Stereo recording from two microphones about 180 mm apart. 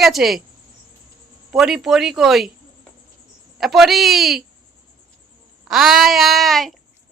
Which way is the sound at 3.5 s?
Centre (ahead or behind).